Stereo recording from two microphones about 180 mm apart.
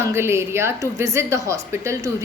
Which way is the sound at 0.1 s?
15° right (ahead or behind).